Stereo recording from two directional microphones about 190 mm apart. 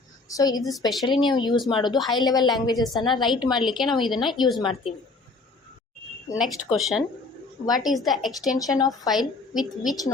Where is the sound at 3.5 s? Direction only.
Centre (ahead or behind).